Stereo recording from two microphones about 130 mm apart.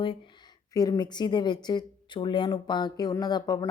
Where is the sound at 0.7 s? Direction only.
30° left (ahead or behind).